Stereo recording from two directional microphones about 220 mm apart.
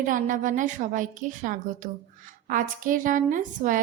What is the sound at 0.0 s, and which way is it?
A woman's voice, 35° right (ahead or behind).